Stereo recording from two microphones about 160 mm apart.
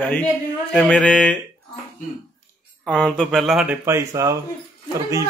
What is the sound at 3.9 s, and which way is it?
Speech, 20° right (ahead or behind).